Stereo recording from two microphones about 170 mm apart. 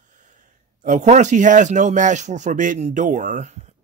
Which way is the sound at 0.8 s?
45° right (ahead or behind).